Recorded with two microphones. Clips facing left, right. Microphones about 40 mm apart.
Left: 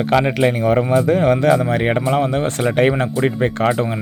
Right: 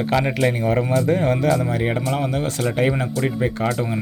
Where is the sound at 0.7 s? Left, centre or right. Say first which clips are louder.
Left 4 dB; left.